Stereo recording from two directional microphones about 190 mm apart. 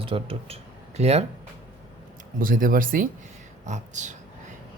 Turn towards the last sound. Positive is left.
turn(degrees=-40)  # may be behind; listen again after turning